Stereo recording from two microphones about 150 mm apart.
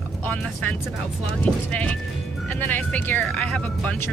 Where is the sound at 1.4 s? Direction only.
10° left (ahead or behind).